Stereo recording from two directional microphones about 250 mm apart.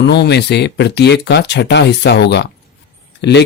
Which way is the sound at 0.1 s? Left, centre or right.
Left.